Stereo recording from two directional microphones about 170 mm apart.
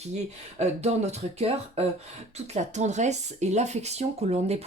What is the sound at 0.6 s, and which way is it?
Speech, 40° right (ahead or behind).